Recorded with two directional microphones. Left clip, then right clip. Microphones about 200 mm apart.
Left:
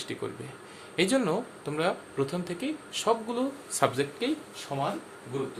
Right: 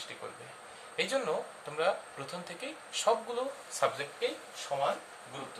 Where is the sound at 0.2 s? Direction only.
45° left (ahead or behind).